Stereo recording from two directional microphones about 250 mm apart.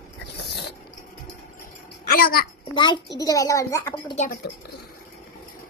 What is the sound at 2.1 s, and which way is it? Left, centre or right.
Speech, left.